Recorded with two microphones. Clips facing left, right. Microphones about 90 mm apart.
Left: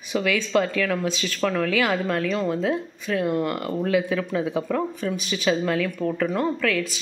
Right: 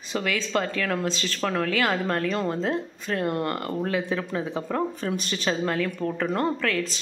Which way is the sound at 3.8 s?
25° right (ahead or behind).